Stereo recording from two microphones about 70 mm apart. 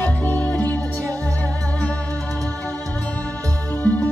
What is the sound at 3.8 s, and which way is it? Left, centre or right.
Music, left.